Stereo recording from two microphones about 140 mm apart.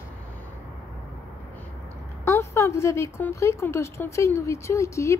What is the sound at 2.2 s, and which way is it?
Speech, 20° left (ahead or behind).